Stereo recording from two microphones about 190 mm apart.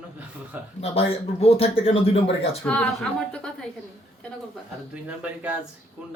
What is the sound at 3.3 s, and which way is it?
Speech, 5° left (ahead or behind).